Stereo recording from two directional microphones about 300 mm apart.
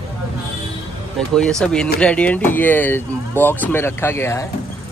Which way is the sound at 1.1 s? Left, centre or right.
Centre.